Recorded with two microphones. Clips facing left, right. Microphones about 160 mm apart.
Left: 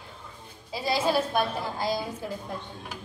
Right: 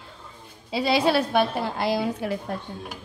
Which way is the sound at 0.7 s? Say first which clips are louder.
Right 4 dB; 75° right (ahead or behind).